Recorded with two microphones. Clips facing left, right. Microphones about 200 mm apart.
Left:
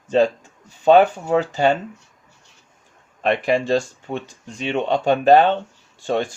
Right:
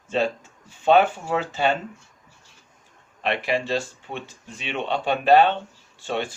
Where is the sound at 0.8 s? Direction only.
40° left (ahead or behind).